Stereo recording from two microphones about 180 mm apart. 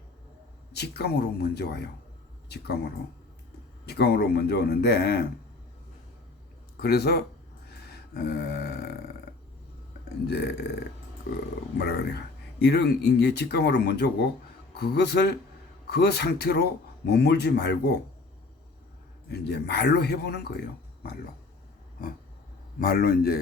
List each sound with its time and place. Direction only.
0.7 s a man's voice: 65° left (ahead or behind)
6.7 s a man's voice: 60° left (ahead or behind)
7.7 s a sound: 60° left (ahead or behind)
10.2 s a man's voice: 60° left (ahead or behind)
11.8 s speech: 65° left (ahead or behind)
19.3 s speech: 70° left (ahead or behind)
22.9 s a man's voice: 55° left (ahead or behind)